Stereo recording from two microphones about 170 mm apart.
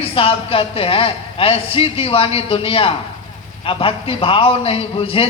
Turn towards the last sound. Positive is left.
turn(degrees=35)  # may be behind; listen again after turning